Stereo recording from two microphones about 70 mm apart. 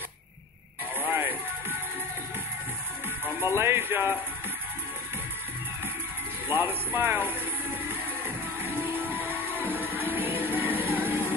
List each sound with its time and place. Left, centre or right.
0.9 s music: right
3.3 s speech: right
6.5 s speech: right
8.6 s music: right